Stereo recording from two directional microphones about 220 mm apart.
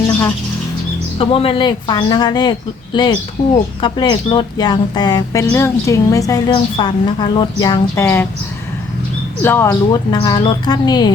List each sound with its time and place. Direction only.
1.2 s speech: 25° left (ahead or behind)
9.4 s speech: 10° left (ahead or behind)